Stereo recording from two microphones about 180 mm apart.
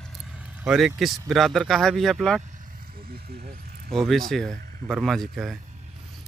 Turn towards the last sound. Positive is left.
turn(degrees=0)  # may be behind; listen again after turning